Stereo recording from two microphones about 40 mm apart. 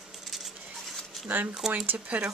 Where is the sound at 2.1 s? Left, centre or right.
Right.